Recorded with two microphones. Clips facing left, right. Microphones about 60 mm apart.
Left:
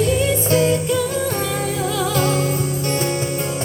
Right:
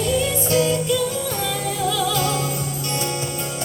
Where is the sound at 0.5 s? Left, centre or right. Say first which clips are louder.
Left 1 dB; left.